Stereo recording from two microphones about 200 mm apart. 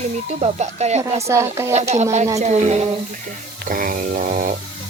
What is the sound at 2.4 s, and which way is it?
Speech, 35° right (ahead or behind).